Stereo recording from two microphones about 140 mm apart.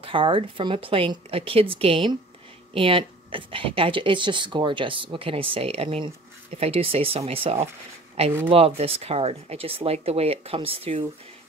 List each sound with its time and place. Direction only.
0.0 s a woman's voice: 40° right (ahead or behind)